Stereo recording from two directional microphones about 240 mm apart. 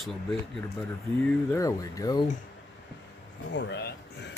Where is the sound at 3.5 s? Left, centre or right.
Left.